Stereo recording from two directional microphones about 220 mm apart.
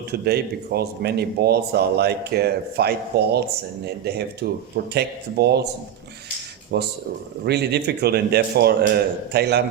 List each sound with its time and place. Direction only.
0.1 s speech: 45° right (ahead or behind)
6.7 s speech: 50° right (ahead or behind)